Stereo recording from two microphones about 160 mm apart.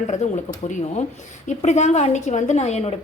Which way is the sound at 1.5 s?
45° left (ahead or behind).